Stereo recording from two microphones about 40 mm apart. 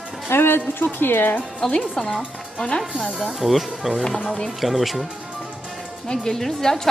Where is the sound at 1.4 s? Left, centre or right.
Left.